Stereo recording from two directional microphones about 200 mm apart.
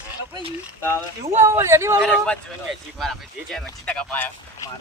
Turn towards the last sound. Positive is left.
turn(degrees=10)  # may be behind; listen again after turning